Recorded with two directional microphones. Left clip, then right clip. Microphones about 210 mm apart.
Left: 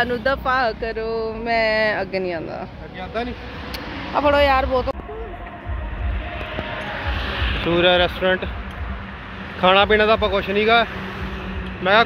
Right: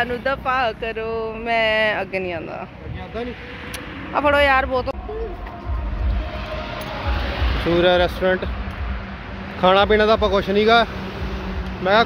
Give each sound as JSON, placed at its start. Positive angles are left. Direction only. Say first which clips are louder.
{"t": 0.0, "sound": "speech", "louder": "left 1 dB", "side_deg": 15}
{"t": 4.1, "sound": "speech", "louder": "even", "side_deg": 0}
{"t": 6.5, "sound": "music", "louder": "left 1 dB", "side_deg": -70}
{"t": 7.7, "sound": "speech", "louder": "even", "side_deg": -15}
{"t": 9.6, "sound": "speech", "louder": "even", "side_deg": -15}
{"t": 11.8, "sound": "speech", "louder": "left 1 dB", "side_deg": -10}